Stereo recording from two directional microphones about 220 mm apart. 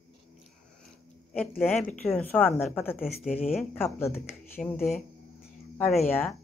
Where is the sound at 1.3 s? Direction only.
Centre (ahead or behind).